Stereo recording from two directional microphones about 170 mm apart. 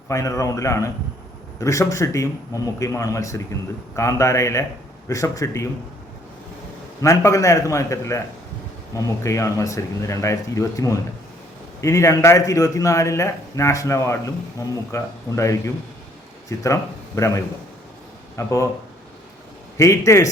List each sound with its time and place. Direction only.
0.1 s a man's voice: 20° left (ahead or behind)
7.0 s a man's voice: 15° left (ahead or behind)
19.7 s a man's voice: 15° left (ahead or behind)